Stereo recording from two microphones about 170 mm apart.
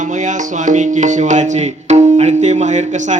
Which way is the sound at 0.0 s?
45° right (ahead or behind).